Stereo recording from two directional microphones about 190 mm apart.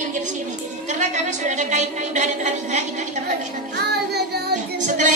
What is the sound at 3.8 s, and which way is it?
Music, 60° right (ahead or behind).